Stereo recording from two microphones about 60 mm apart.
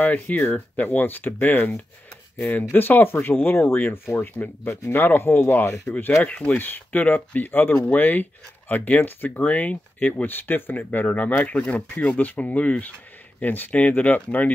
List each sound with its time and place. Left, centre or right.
0.0 s speech: left